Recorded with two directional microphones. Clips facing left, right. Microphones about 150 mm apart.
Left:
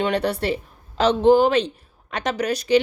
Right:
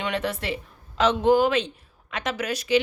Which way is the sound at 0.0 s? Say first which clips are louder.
Left 6 dB; 35° left (ahead or behind).